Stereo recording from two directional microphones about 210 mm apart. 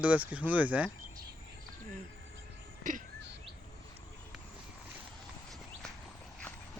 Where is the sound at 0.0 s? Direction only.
5° right (ahead or behind).